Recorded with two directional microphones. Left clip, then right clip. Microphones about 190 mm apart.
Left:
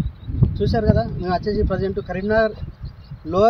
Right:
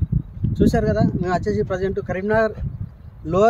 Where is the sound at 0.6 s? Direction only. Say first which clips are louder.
Right 1 dB; 20° right (ahead or behind).